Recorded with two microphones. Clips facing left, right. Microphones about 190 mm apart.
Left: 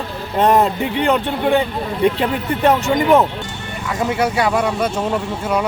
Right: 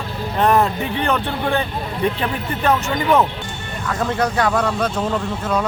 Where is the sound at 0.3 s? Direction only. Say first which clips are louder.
Left 2 dB; 20° left (ahead or behind).